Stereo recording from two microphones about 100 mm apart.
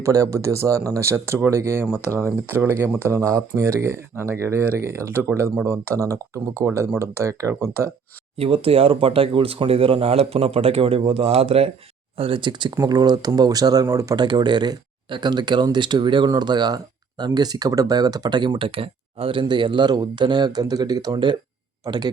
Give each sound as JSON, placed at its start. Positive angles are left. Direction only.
{"t": 0.0, "sound": "speech", "side_deg": -35}
{"t": 8.4, "sound": "speech", "side_deg": -75}
{"t": 12.1, "sound": "speech", "side_deg": -75}
{"t": 12.4, "sound": "speech", "side_deg": -50}
{"t": 14.3, "sound": "speech", "side_deg": -50}